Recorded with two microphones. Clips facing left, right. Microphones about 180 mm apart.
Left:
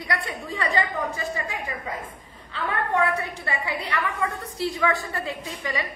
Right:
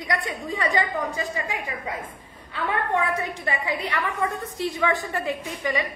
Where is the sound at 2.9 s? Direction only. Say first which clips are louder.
Left 1 dB; 15° right (ahead or behind).